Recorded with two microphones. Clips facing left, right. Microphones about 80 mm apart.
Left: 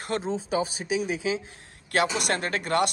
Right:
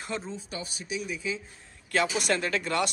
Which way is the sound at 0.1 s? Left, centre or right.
Left.